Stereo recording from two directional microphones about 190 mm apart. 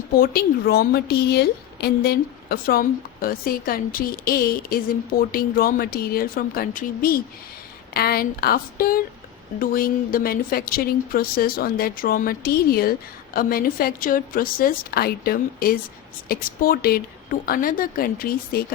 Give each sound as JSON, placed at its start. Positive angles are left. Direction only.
{"t": 0.2, "sound": "a woman's voice", "side_deg": 55}